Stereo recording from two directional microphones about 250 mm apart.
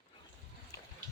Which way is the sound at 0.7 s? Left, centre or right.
Centre.